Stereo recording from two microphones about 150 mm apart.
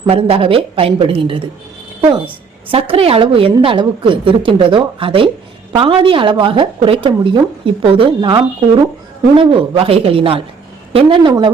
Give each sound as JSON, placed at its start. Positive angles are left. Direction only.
{"t": 0.0, "sound": "a woman's voice", "side_deg": -40}
{"t": 2.6, "sound": "a woman's voice", "side_deg": -40}